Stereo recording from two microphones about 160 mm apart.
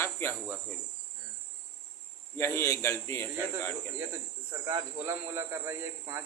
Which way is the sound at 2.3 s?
15° left (ahead or behind).